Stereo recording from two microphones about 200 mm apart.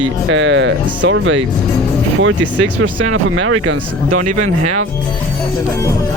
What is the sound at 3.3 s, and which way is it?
Speech, 90° right.